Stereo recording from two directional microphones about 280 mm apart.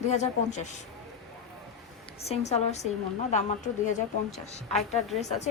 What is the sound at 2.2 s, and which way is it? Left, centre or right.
A woman's voice, left.